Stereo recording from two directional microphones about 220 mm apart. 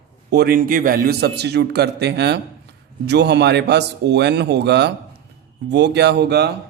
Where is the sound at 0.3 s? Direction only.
45° right (ahead or behind).